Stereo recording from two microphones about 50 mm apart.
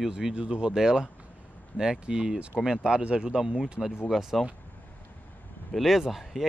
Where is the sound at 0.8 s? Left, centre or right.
Centre.